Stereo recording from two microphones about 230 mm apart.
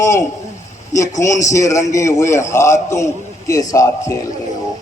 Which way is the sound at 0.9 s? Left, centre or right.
Centre.